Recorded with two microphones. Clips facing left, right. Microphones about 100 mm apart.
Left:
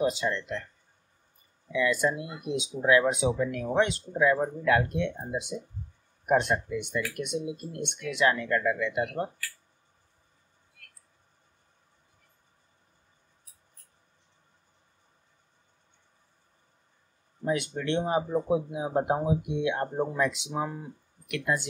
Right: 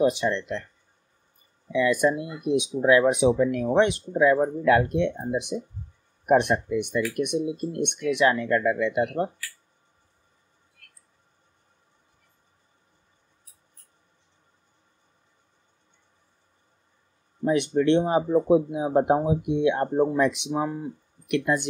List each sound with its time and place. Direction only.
0.0 s speech: 20° right (ahead or behind)
1.7 s speech: 20° right (ahead or behind)
6.2 s speech: 20° right (ahead or behind)
17.5 s speech: 25° right (ahead or behind)